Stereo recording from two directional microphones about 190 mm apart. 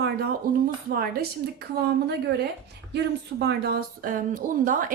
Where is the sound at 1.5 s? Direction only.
60° right (ahead or behind).